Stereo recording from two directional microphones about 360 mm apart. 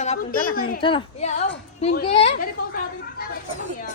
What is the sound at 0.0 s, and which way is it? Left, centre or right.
A woman's voice, left.